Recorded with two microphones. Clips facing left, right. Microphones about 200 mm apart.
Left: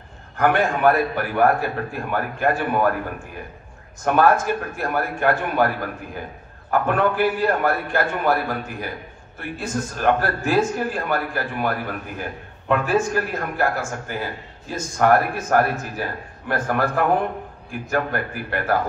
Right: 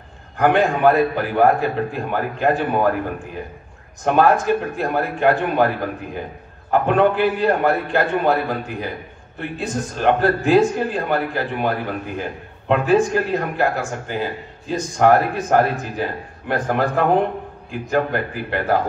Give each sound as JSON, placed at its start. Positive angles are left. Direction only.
{"t": 0.4, "sound": "a man's voice", "side_deg": -15}
{"t": 4.0, "sound": "a man's voice", "side_deg": -20}
{"t": 6.7, "sound": "a man's voice", "side_deg": -20}